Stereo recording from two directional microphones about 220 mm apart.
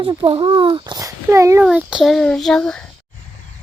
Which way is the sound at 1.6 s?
5° right (ahead or behind).